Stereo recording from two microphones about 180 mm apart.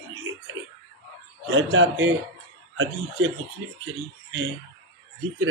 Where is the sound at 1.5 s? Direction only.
90° right.